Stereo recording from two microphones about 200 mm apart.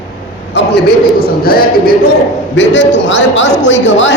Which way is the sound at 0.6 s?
65° left (ahead or behind).